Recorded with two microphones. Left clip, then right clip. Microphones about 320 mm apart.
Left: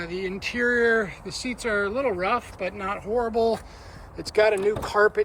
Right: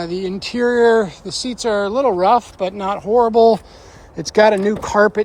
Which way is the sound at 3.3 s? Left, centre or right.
Right.